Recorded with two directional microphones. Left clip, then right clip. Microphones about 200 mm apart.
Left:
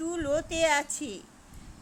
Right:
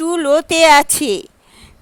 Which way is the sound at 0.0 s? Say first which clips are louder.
Right 15 dB; 45° right (ahead or behind).